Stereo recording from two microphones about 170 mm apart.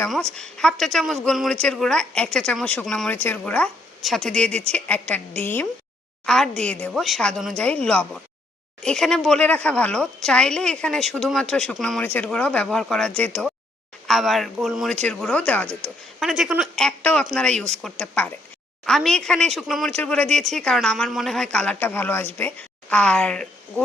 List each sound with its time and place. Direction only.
0.3 s speech: 5° left (ahead or behind)
16.2 s speech: 5° right (ahead or behind)